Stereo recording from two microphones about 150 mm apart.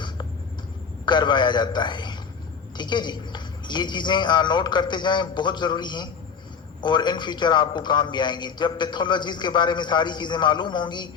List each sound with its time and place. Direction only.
1.0 s a man's voice: 30° left (ahead or behind)